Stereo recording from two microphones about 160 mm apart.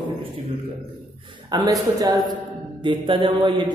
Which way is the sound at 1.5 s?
25° right (ahead or behind).